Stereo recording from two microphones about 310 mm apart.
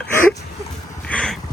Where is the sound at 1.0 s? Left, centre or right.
Centre.